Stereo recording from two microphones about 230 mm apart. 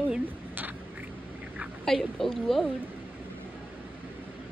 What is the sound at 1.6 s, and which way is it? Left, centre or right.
A woman's voice, centre.